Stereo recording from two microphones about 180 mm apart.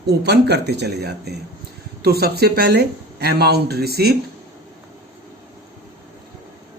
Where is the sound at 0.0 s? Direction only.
65° right (ahead or behind).